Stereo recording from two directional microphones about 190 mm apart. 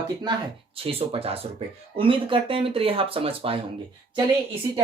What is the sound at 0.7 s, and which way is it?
Speech, 30° right (ahead or behind).